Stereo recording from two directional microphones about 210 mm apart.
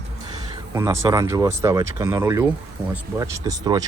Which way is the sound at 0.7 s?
15° right (ahead or behind).